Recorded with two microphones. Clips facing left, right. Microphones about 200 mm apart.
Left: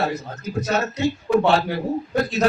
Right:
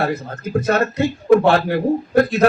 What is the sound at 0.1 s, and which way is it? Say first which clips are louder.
A man's voice: right 6 dB; 55° right (ahead or behind).